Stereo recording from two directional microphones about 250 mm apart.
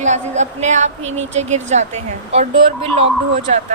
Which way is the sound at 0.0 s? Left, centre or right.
Right.